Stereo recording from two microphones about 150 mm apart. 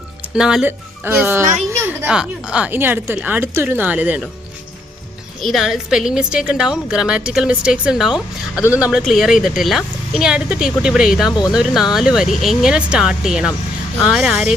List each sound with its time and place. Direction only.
0.2 s speech: 5° right (ahead or behind)
5.4 s a woman's voice: centre (ahead or behind)
11.3 s speech: 25° left (ahead or behind)
11.5 s a woman's voice: 5° right (ahead or behind)